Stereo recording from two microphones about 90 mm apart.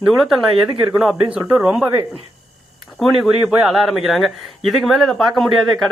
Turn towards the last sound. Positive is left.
turn(degrees=0)  # may be behind; listen again after turning